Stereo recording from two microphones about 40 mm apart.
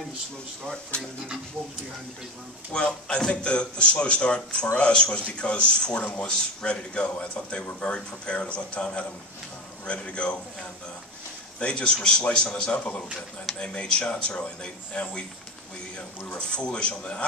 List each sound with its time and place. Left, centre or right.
2.7 s speech: left
16.4 s speech: left